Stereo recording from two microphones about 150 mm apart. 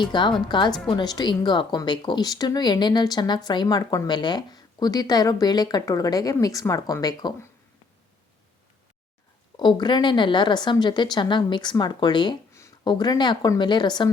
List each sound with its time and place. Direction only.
0.0 s a woman's voice: 30° left (ahead or behind)
9.6 s a woman's voice: 30° left (ahead or behind)